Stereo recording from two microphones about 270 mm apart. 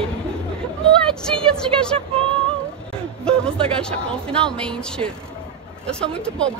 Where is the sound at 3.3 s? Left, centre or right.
Centre.